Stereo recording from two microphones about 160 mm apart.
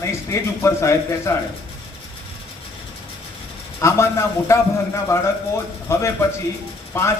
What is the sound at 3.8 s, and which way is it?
A man's voice, 15° left (ahead or behind).